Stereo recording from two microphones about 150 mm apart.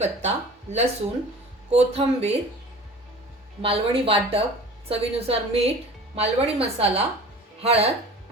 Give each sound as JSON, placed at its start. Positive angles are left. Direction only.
{"t": 0.0, "sound": "speech", "side_deg": -50}
{"t": 3.6, "sound": "a woman's voice", "side_deg": -40}